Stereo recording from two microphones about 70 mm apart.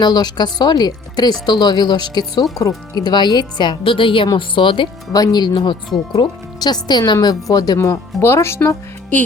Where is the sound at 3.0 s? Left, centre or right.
Left.